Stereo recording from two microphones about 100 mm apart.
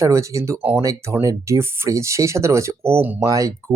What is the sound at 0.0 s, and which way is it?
Speech, 30° right (ahead or behind).